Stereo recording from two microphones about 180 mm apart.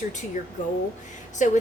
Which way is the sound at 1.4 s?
45° left (ahead or behind).